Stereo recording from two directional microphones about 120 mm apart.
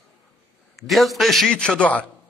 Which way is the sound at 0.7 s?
Centre (ahead or behind).